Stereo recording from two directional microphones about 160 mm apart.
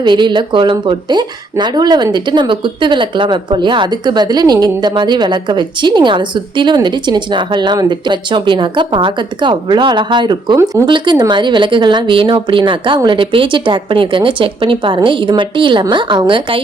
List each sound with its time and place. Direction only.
0.0 s a woman's voice: 30° right (ahead or behind)